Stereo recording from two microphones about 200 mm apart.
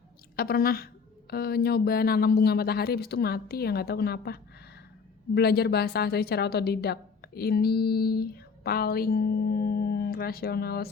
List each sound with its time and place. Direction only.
0.3 s a woman's voice: 50° left (ahead or behind)